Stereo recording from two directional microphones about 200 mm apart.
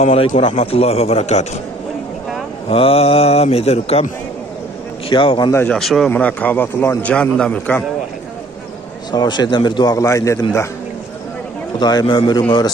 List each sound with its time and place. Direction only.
0.0 s a man's voice: 30° left (ahead or behind)
2.7 s speech: 30° left (ahead or behind)
5.1 s a man's voice: 25° left (ahead or behind)
5.5 s a man's voice: 10° left (ahead or behind)
9.1 s a man's voice: 20° left (ahead or behind)
11.8 s a man's voice: 20° left (ahead or behind)